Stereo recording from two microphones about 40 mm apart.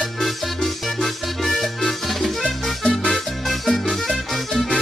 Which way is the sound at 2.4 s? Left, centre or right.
Centre.